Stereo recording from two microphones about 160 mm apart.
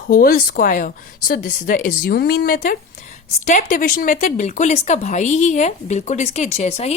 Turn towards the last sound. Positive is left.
turn(degrees=45)  # may be behind; listen again after turning